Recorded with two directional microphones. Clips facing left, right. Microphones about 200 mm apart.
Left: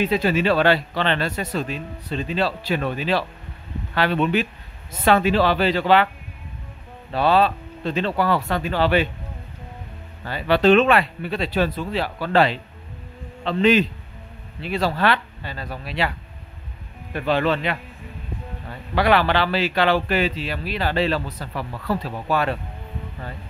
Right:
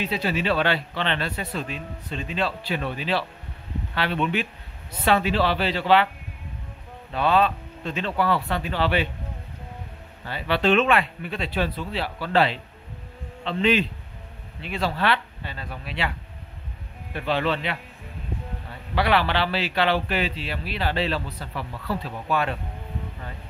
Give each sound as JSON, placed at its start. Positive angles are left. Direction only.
{"t": 0.0, "sound": "speech", "side_deg": 50}
{"t": 7.1, "sound": "speech", "side_deg": 35}
{"t": 10.2, "sound": "speech", "side_deg": 45}
{"t": 17.1, "sound": "speech", "side_deg": 45}
{"t": 18.9, "sound": "speech", "side_deg": 45}